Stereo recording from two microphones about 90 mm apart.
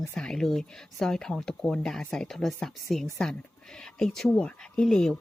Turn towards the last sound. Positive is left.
turn(degrees=5)  # may be behind; listen again after turning